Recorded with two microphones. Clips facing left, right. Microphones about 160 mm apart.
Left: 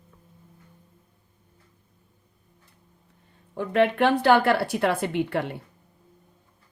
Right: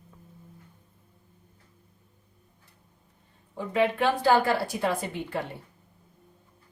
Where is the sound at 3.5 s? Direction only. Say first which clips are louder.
Left 4 dB; 65° left (ahead or behind).